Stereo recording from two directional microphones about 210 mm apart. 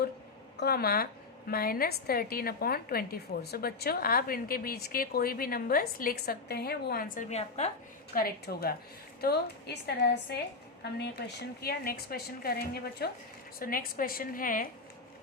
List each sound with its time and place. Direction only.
0.6 s a woman's voice: 50° left (ahead or behind); by 7.7 s 30° left (ahead or behind)
8.1 s a woman's voice: 45° left (ahead or behind)